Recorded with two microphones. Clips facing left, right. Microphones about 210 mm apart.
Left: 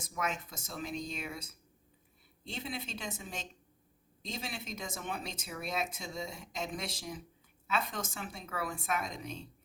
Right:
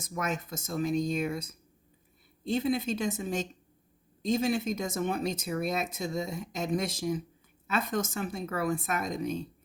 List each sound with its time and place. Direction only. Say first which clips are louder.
0.0 s speech: right 4 dB; 45° right (ahead or behind)